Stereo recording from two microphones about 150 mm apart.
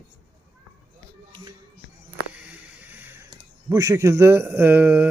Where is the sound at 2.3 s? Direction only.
10° right (ahead or behind).